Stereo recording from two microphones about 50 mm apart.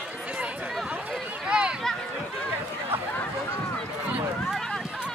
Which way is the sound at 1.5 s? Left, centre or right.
Centre.